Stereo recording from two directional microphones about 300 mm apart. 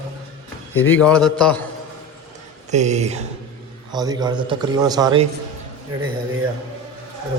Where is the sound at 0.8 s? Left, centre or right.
Centre.